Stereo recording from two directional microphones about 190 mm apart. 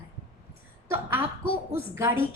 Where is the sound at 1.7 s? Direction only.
10° right (ahead or behind).